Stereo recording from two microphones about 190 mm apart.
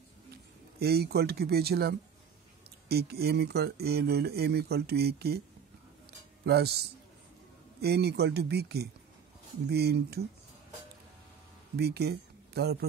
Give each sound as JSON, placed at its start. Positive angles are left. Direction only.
{"t": 0.7, "sound": "speech", "side_deg": -55}
{"t": 6.4, "sound": "speech", "side_deg": -60}
{"t": 11.7, "sound": "speech", "side_deg": -60}